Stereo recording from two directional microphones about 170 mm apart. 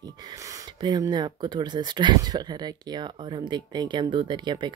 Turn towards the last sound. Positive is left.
turn(degrees=-25)  # may be behind; listen again after turning